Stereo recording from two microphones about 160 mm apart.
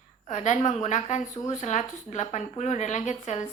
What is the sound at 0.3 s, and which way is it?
A woman's voice, 50° left (ahead or behind).